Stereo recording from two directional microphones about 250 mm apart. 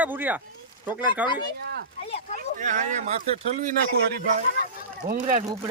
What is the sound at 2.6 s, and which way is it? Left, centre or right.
Speech, right.